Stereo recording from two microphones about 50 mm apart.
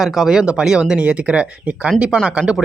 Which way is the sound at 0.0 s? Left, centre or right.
Centre.